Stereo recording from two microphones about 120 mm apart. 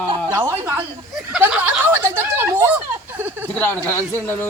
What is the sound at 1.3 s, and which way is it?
Speech, 10° right (ahead or behind).